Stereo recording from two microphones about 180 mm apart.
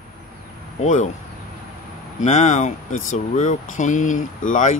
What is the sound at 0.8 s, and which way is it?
Speech, 45° left (ahead or behind).